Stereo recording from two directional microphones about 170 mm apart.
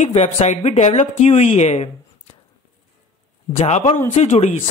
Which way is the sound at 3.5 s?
40° left (ahead or behind).